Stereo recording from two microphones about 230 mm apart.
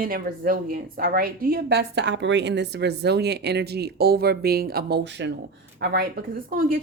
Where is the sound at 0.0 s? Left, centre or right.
Right.